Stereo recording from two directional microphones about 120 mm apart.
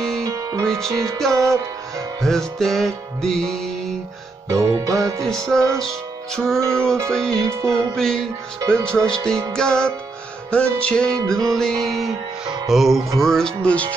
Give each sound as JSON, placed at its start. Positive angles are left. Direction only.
{"t": 0.2, "sound": "music", "side_deg": -30}
{"t": 0.7, "sound": "music", "side_deg": 5}
{"t": 0.9, "sound": "music", "side_deg": -25}
{"t": 2.2, "sound": "music", "side_deg": 5}
{"t": 4.5, "sound": "music", "side_deg": -25}
{"t": 5.2, "sound": "music", "side_deg": 5}
{"t": 7.4, "sound": "music", "side_deg": -25}
{"t": 7.9, "sound": "music", "side_deg": 5}
{"t": 8.5, "sound": "music", "side_deg": -25}
{"t": 8.8, "sound": "music", "side_deg": 5}